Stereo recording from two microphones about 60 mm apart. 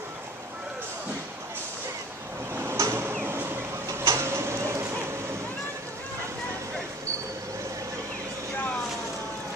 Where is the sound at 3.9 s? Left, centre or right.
Right.